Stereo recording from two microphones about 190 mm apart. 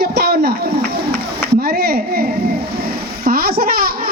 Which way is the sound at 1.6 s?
55° right (ahead or behind).